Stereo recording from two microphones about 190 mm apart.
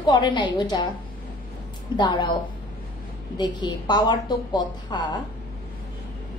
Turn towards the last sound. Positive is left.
turn(degrees=25)  # may be behind; listen again after turning